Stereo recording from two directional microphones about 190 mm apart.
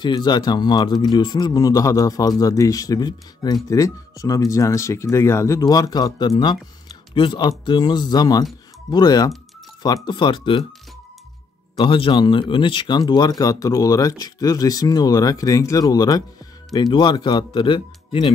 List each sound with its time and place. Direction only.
0.0 s speech: 25° left (ahead or behind)
11.7 s speech: 25° left (ahead or behind)